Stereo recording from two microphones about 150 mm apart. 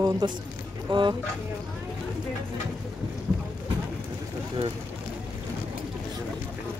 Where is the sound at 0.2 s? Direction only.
30° right (ahead or behind).